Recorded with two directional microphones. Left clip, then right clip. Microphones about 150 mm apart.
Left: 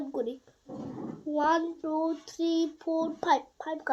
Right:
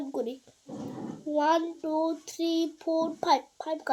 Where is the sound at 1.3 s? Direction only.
15° right (ahead or behind).